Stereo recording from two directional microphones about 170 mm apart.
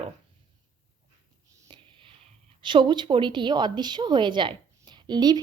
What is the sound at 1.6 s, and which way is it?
A woman's voice, 30° right (ahead or behind).